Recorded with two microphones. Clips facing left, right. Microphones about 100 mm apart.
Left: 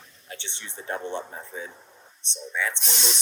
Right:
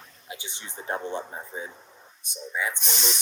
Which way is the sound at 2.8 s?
Centre (ahead or behind).